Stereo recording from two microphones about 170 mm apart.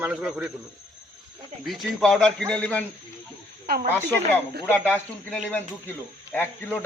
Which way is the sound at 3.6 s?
65° right (ahead or behind).